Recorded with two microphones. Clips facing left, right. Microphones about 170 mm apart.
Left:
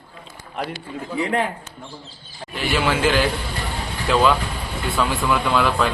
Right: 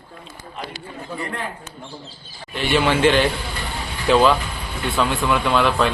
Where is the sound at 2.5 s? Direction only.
Centre (ahead or behind).